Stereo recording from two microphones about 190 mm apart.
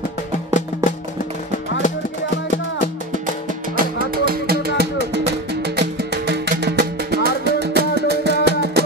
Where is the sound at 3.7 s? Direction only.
50° right (ahead or behind).